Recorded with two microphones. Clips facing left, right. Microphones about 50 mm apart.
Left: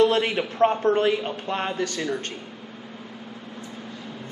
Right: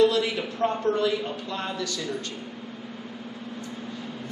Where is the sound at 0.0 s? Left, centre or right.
Left.